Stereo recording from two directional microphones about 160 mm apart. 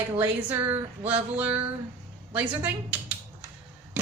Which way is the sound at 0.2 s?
15° right (ahead or behind).